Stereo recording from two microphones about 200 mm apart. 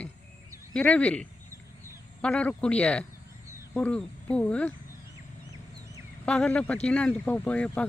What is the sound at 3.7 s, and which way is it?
Speech, 5° left (ahead or behind).